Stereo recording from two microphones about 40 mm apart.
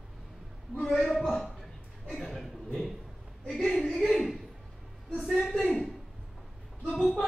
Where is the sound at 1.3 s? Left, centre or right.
Centre.